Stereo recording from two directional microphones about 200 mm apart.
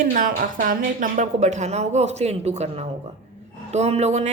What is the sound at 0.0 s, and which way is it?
A woman's voice, 45° right (ahead or behind).